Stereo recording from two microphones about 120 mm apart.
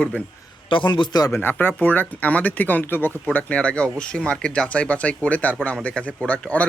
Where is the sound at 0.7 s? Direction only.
45° left (ahead or behind).